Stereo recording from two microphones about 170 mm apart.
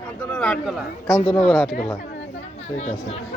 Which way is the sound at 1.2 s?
35° left (ahead or behind).